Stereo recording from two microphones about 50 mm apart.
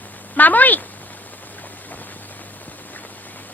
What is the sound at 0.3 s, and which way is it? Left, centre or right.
Speech, left.